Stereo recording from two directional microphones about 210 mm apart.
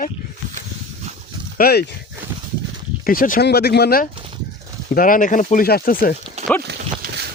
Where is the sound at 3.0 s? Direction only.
45° left (ahead or behind).